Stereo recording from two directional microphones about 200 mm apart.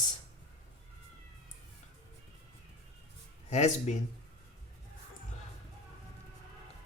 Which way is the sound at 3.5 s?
35° left (ahead or behind).